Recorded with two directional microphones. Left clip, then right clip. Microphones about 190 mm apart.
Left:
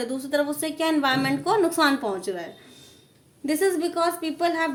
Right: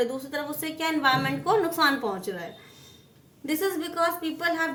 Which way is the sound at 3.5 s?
30° left (ahead or behind).